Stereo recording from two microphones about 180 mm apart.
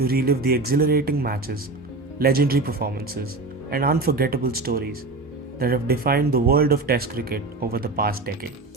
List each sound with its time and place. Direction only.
0.0 s speech: 55° right (ahead or behind)